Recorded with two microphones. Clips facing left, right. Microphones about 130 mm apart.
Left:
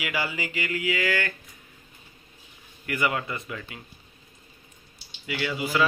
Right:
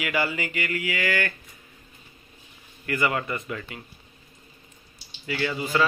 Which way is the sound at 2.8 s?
15° left (ahead or behind).